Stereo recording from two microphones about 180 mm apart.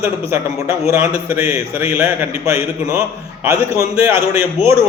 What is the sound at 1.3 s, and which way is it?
A man's voice, 15° right (ahead or behind).